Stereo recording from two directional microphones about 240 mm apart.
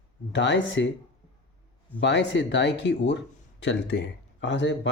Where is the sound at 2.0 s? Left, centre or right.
Left.